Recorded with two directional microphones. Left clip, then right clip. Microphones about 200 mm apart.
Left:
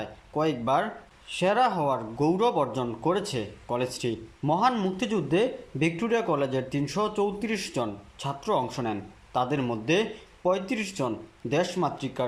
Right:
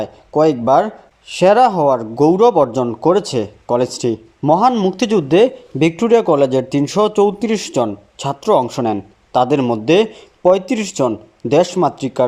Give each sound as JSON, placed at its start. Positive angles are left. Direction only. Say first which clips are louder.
{"t": 0.0, "sound": "speech", "louder": "right 14 dB", "side_deg": -35}